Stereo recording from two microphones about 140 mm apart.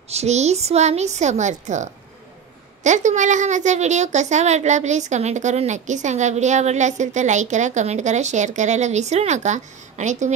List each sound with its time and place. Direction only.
0.1 s a woman's voice: 50° right (ahead or behind)